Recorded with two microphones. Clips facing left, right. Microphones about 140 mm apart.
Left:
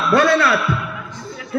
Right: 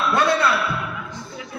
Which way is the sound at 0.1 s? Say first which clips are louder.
Left 6 dB; 90° left.